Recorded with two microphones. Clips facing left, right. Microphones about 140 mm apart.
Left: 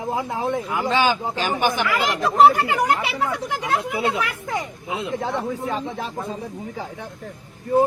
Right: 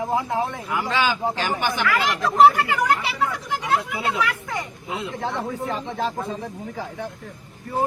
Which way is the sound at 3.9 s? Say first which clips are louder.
Left 1 dB; 20° left (ahead or behind).